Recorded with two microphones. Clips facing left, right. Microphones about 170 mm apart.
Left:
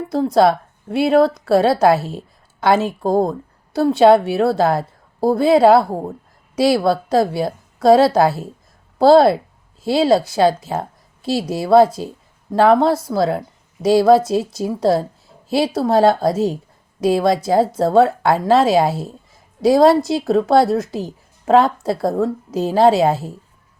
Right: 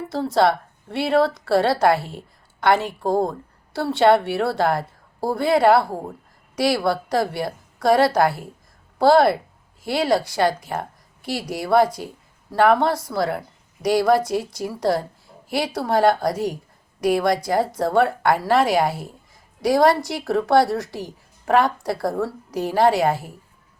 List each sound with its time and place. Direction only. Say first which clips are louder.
0.1 s a woman's voice: left 5 dB; centre (ahead or behind)
2.0 s speech: left 6 dB; 25° left (ahead or behind)
3.9 s a woman's voice: left 4 dB; centre (ahead or behind)
5.2 s a woman's voice: left 5 dB; 25° left (ahead or behind)